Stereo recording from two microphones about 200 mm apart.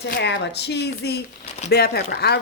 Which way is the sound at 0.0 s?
55° left (ahead or behind).